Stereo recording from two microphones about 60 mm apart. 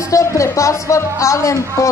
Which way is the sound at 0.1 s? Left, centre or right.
Left.